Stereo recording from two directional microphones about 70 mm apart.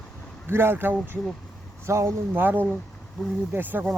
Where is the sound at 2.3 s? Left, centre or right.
Right.